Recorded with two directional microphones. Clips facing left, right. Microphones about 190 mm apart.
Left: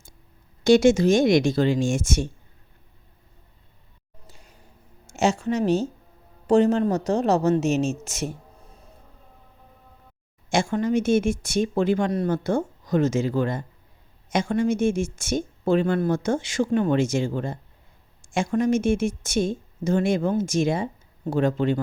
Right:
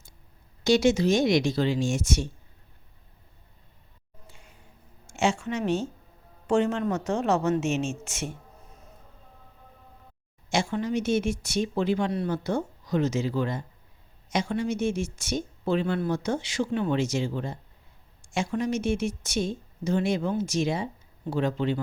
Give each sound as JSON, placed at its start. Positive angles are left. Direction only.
{"t": 0.6, "sound": "a woman's voice", "side_deg": 50}
{"t": 4.3, "sound": "a sound", "side_deg": 40}
{"t": 5.0, "sound": "a woman's voice", "side_deg": 40}
{"t": 10.5, "sound": "a woman's voice", "side_deg": 50}